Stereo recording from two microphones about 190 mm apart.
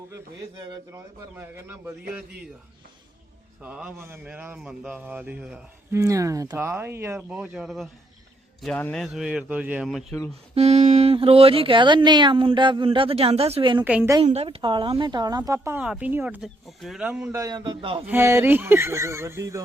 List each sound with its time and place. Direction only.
0.9 s a man's voice: 10° right (ahead or behind)
3.6 s a man's voice: 5° right (ahead or behind)
6.0 s a man's voice: 15° right (ahead or behind); by 10.2 s centre (ahead or behind)
10.5 s speech: 35° right (ahead or behind)
13.8 s a man's voice: 10° right (ahead or behind)
14.3 s a man's voice: 30° right (ahead or behind)
18.0 s a man's voice: 10° right (ahead or behind)